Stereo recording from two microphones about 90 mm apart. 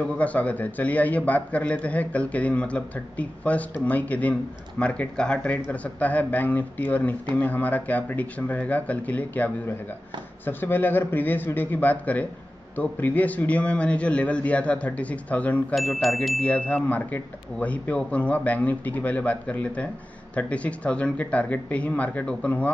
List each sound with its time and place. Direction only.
0.0 s a man's voice: 15° left (ahead or behind)
15.7 s a man's voice: centre (ahead or behind)